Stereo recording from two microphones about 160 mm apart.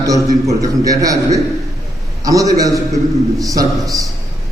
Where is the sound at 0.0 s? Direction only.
20° right (ahead or behind).